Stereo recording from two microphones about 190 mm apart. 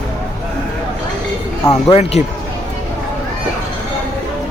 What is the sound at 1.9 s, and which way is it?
Speech, 35° left (ahead or behind).